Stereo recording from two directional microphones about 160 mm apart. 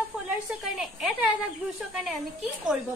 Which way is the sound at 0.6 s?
5° right (ahead or behind).